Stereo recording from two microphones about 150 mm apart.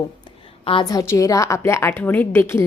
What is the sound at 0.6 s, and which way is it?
A woman's voice, 35° left (ahead or behind).